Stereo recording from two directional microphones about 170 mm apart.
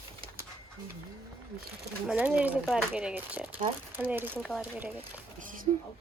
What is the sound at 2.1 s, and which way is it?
Speech, 10° right (ahead or behind).